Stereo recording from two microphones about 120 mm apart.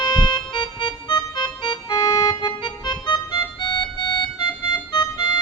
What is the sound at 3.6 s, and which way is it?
Music, 40° left (ahead or behind).